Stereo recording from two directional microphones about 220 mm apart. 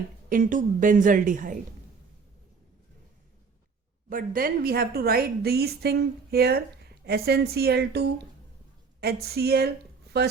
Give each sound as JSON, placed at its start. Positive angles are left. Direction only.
{"t": 0.3, "sound": "a woman's voice", "side_deg": -40}
{"t": 4.1, "sound": "a woman's voice", "side_deg": -40}